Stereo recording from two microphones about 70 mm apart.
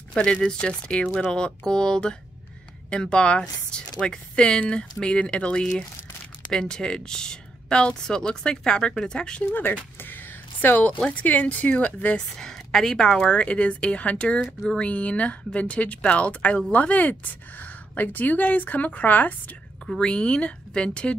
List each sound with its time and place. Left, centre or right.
0.1 s speech: centre
9.5 s a sound: left
11.1 s speech: left
12.4 s speech: centre; by 19.3 s left
20.0 s speech: centre